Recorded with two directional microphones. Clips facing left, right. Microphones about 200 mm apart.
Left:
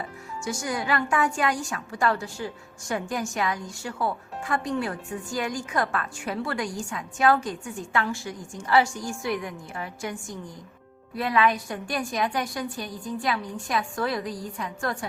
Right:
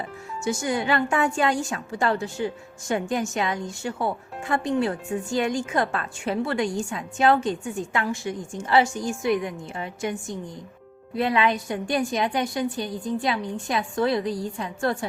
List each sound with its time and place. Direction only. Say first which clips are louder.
0.4 s a woman's voice: right 4 dB; 25° right (ahead or behind)